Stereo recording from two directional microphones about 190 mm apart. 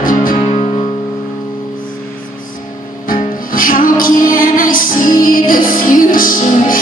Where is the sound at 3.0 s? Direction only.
45° left (ahead or behind).